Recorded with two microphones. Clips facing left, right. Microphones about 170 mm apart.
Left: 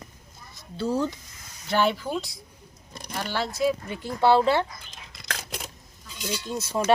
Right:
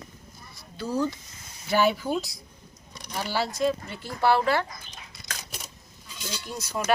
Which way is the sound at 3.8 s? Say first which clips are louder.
Left 3 dB; 15° left (ahead or behind).